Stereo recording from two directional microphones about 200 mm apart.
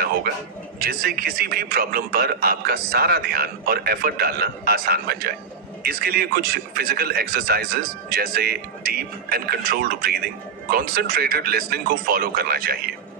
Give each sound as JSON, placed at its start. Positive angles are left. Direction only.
{"t": 0.7, "sound": "a man's voice", "side_deg": -50}